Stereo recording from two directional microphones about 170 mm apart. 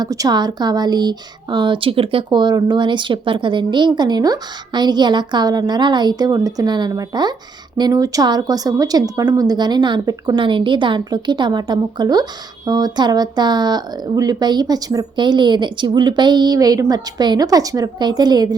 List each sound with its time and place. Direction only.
0.0 s a woman's voice: 20° right (ahead or behind)